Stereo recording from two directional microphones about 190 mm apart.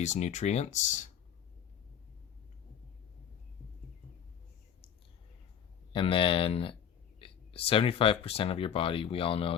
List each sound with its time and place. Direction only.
0.0 s speech: 40° left (ahead or behind)
5.9 s speech: 30° left (ahead or behind)